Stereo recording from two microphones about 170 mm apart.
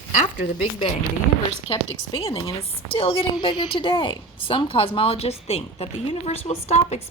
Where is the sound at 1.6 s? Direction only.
30° left (ahead or behind).